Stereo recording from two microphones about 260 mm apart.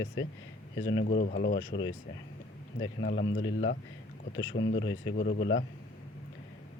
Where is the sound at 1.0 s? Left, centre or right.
Left.